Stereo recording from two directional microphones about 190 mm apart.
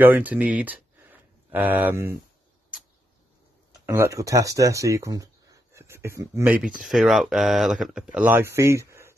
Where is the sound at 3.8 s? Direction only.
15° right (ahead or behind).